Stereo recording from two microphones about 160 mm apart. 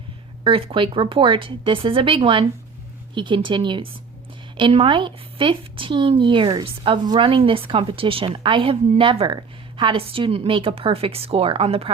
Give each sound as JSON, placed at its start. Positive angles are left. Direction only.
{"t": 0.4, "sound": "speech", "side_deg": -35}